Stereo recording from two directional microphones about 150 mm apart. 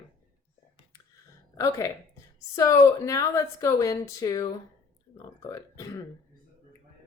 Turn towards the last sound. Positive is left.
turn(degrees=20)  # may be behind; listen again after turning